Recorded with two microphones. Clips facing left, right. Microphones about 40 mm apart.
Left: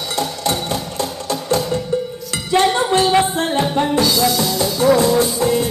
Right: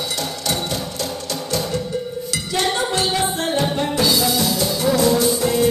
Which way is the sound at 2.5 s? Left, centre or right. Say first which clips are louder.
Left 6 dB; left.